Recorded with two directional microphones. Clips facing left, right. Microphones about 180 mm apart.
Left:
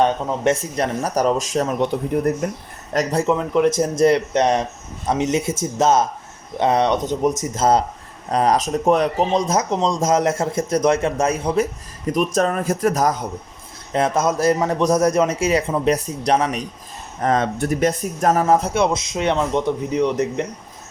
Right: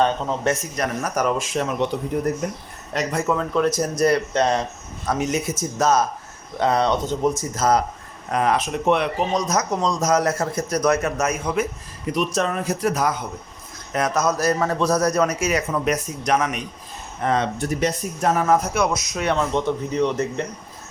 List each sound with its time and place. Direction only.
0.4 s speech: 30° left (ahead or behind)
1.9 s speech: 55° left (ahead or behind)
2.9 s speech: 40° left (ahead or behind)
3.3 s a man's voice: 20° left (ahead or behind); by 9.2 s 40° left (ahead or behind)
9.3 s a man's voice: 25° left (ahead or behind)
12.1 s speech: 45° left (ahead or behind)
13.9 s a man's voice: 25° left (ahead or behind)
17.2 s speech: 50° left (ahead or behind)
18.4 s a man's voice: 30° left (ahead or behind)